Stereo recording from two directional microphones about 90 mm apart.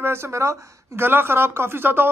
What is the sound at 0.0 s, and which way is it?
Speech, 30° right (ahead or behind).